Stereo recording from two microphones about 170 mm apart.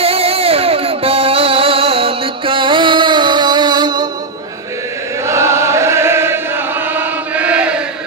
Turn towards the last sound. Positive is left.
turn(degrees=-5)  # may be behind; listen again after turning